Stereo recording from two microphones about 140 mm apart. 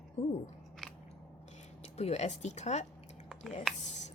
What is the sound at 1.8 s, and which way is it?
Speech, 50° left (ahead or behind).